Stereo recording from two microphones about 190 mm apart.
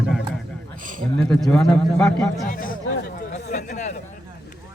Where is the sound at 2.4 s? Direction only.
45° left (ahead or behind).